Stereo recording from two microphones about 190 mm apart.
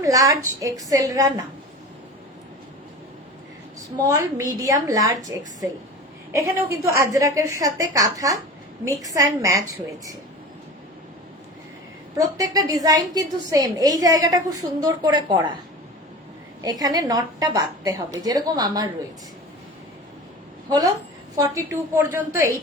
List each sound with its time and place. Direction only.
0.0 s a woman's voice: 20° right (ahead or behind)
3.9 s a woman's voice: 15° right (ahead or behind)
12.1 s a woman's voice: 20° right (ahead or behind)
16.6 s a woman's voice: 20° right (ahead or behind)
20.7 s a woman's voice: 20° right (ahead or behind)